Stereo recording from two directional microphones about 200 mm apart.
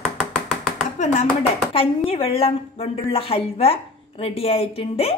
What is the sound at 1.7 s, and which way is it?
A woman's voice, 30° left (ahead or behind).